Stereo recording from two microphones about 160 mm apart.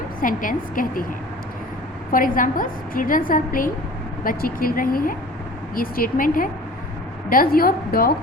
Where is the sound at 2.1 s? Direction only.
60° left (ahead or behind).